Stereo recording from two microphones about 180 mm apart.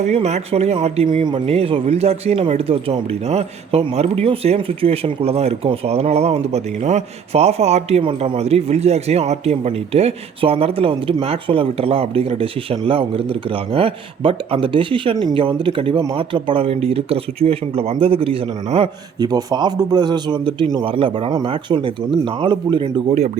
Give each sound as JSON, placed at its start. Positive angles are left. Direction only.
{"t": 0.0, "sound": "a man's voice", "side_deg": -40}